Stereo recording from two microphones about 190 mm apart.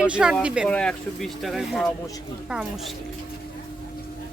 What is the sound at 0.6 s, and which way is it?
Speech, 5° left (ahead or behind).